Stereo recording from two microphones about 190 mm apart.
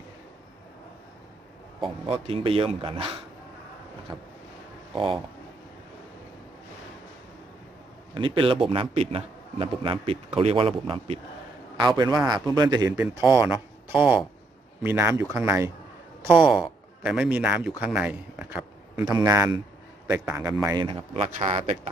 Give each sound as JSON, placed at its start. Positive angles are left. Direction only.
{"t": 2.0, "sound": "a man's voice", "side_deg": -30}
{"t": 4.1, "sound": "vehicle", "side_deg": -5}
{"t": 8.1, "sound": "a man's voice", "side_deg": -25}
{"t": 11.9, "sound": "a man's voice", "side_deg": -20}
{"t": 16.5, "sound": "a man's voice", "side_deg": -5}